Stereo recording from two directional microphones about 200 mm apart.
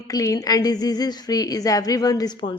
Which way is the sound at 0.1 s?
15° left (ahead or behind).